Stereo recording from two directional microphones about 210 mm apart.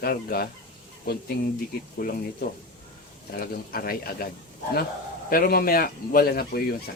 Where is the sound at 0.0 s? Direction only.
45° left (ahead or behind).